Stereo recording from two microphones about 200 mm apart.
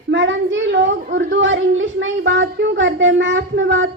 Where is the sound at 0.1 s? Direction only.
70° right (ahead or behind).